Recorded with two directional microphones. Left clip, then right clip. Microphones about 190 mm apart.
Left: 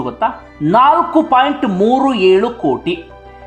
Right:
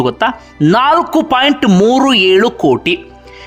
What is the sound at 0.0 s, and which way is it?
Speech, 25° right (ahead or behind).